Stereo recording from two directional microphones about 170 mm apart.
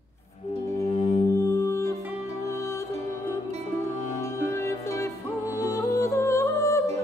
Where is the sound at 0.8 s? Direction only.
35° left (ahead or behind).